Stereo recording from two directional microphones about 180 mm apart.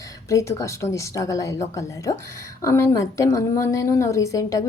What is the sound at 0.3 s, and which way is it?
A woman's voice, 15° left (ahead or behind).